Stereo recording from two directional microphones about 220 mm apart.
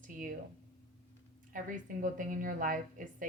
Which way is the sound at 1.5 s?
35° right (ahead or behind).